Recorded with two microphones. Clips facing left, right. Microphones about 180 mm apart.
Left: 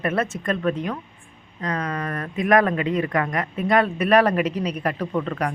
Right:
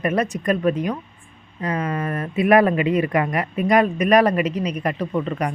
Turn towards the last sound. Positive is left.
turn(degrees=-10)  # may be behind; listen again after turning